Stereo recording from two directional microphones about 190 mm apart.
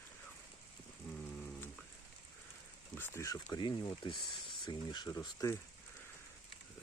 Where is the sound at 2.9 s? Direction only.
10° left (ahead or behind).